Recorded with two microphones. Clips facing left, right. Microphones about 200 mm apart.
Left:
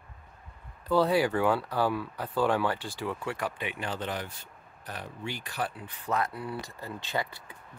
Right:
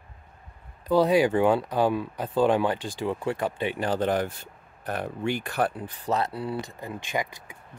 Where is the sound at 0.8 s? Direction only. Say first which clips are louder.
Right 4 dB; 15° right (ahead or behind); by 5.9 s 50° right (ahead or behind).